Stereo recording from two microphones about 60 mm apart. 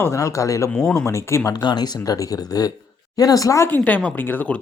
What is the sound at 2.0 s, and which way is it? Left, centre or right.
Speech, left.